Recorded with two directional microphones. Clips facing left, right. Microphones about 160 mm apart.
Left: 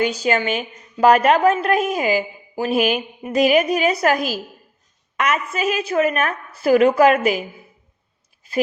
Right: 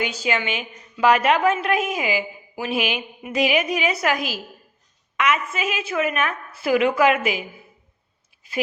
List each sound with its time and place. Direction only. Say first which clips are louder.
0.0 s a woman's voice: left 5 dB; 40° left (ahead or behind)